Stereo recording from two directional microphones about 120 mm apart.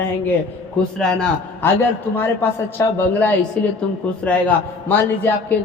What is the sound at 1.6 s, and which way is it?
A man's voice, 20° left (ahead or behind).